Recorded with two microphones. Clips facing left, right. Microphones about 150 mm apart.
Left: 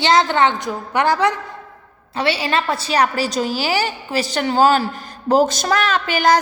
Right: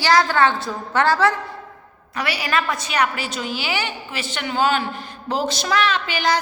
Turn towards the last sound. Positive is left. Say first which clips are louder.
# left 5 dB
turn(degrees=45)  # may be behind; listen again after turning